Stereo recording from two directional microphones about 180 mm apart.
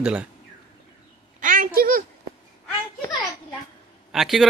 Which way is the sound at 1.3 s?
50° right (ahead or behind).